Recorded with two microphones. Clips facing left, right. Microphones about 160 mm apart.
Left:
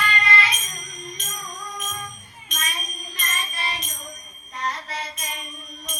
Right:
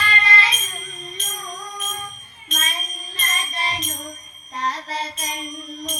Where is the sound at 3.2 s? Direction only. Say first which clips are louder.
Right 3 dB; 30° right (ahead or behind).